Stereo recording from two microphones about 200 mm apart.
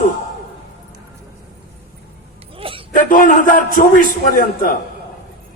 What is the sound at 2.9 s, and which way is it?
A man's voice, 40° left (ahead or behind).